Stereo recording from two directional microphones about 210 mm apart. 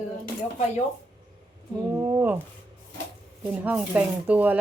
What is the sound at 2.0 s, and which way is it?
Speech, 15° right (ahead or behind).